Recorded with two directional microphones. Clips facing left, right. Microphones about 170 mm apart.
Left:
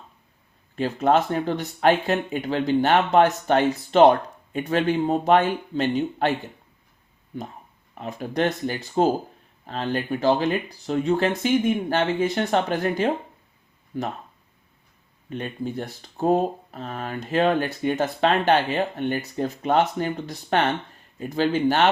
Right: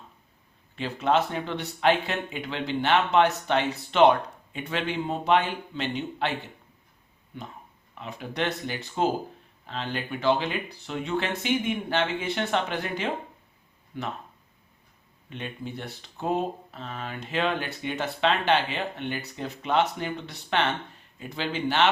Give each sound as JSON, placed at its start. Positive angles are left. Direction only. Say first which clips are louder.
{"t": 0.8, "sound": "speech", "louder": "left 4 dB", "side_deg": 45}
{"t": 7.9, "sound": "speech", "louder": "left 6 dB", "side_deg": 45}
{"t": 15.3, "sound": "speech", "louder": "left 6 dB", "side_deg": 45}